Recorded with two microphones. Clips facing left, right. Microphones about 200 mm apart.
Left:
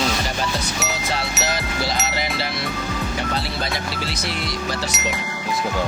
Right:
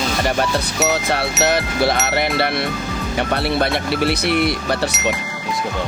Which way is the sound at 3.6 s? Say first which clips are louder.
Right 8 dB; 60° right (ahead or behind).